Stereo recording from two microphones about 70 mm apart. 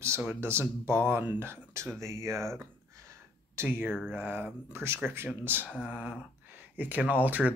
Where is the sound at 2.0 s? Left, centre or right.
Right.